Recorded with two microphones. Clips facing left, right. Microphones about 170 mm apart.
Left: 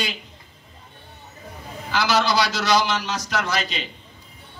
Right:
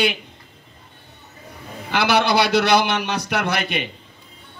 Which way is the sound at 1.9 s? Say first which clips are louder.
Right 3 dB; 60° right (ahead or behind).